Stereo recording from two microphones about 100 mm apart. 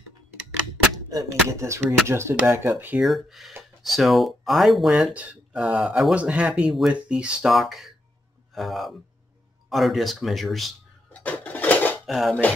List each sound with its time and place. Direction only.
1.0 s a sound: 35° right (ahead or behind)
2.0 s speech: 25° right (ahead or behind)
3.0 s speech: centre (ahead or behind)
5.1 s speech: 15° right (ahead or behind)
11.1 s dishes: 15° left (ahead or behind)
12.1 s speech: 5° right (ahead or behind)